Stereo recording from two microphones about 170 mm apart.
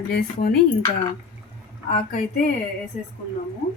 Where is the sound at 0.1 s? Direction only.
60° left (ahead or behind).